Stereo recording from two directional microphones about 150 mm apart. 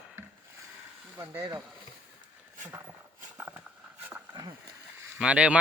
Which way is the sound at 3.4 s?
15° right (ahead or behind).